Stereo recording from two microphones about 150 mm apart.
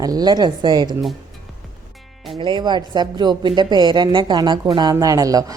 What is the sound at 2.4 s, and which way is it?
A woman's voice, 30° right (ahead or behind).